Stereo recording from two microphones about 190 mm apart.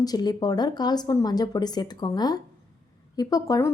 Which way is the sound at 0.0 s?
20° left (ahead or behind).